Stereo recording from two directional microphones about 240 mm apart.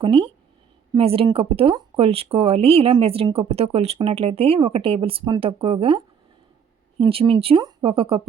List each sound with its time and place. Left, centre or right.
0.0 s speech: right
7.0 s speech: right